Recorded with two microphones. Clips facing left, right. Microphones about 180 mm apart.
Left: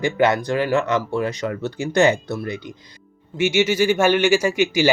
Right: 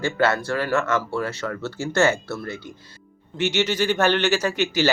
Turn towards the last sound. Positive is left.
turn(degrees=10)  # may be behind; listen again after turning